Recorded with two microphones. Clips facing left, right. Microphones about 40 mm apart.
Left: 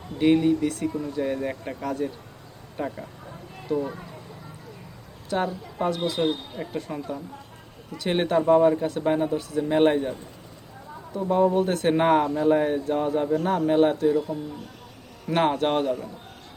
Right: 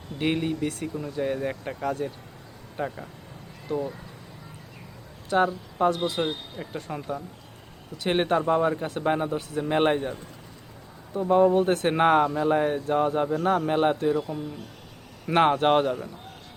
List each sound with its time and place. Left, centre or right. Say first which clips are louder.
0.2 s speech: left 6 dB; centre
5.3 s speech: right 3 dB; centre
7.9 s speech: left 1 dB; centre
11.2 s speech: right 1 dB; centre